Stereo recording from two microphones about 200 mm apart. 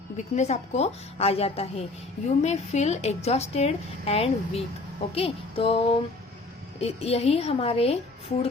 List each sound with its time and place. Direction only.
0.2 s a woman's voice: 35° left (ahead or behind)
5.1 s music: 30° left (ahead or behind)
6.7 s a woman's voice: 30° left (ahead or behind)